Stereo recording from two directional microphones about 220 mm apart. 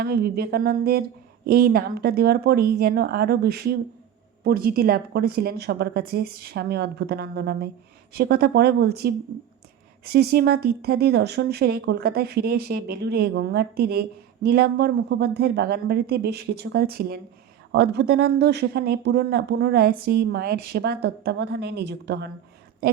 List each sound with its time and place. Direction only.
0.0 s speech: 45° right (ahead or behind)